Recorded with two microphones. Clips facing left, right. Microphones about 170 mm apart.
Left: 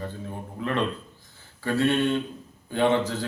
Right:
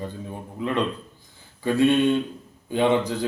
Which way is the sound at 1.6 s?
15° right (ahead or behind).